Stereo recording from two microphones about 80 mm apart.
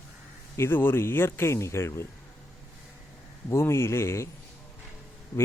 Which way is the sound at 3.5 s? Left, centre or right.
Left.